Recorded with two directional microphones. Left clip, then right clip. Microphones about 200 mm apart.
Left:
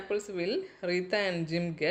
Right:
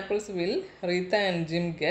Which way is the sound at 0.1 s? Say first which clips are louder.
Right 2 dB; 40° left (ahead or behind).